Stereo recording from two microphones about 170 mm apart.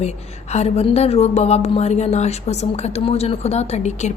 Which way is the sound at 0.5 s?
40° left (ahead or behind).